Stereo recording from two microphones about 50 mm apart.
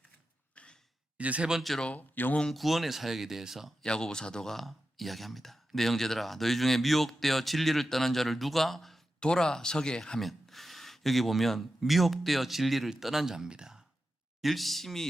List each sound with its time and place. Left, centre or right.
0.5 s a sound: left
1.2 s speech: right
1.8 s speech: left
2.5 s speech: centre
3.8 s speech: centre
9.2 s speech: centre
10.2 s speech: centre
14.4 s speech: centre